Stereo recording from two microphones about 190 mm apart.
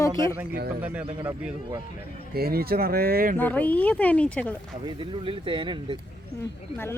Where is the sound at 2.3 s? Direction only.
55° right (ahead or behind).